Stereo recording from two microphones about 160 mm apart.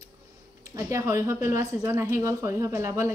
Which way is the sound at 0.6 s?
20° right (ahead or behind).